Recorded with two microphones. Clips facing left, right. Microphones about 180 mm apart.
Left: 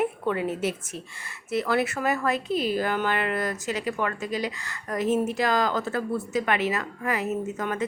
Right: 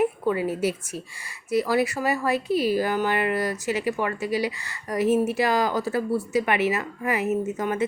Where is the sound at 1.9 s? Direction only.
10° right (ahead or behind).